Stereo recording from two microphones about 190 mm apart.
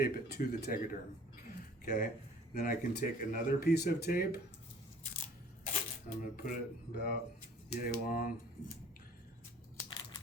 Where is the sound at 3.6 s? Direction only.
55° left (ahead or behind).